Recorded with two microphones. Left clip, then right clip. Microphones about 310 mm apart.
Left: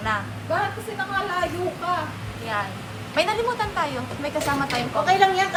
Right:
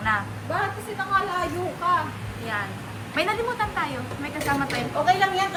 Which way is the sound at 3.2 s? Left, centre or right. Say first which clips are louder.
Left 2 dB; centre.